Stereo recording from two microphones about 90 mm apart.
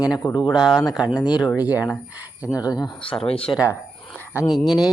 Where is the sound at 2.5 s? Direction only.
45° left (ahead or behind).